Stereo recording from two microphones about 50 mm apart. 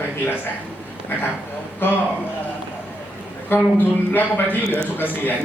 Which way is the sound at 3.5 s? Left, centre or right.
Left.